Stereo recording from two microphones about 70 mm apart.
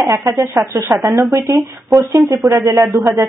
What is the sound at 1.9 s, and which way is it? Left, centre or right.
Speech, right.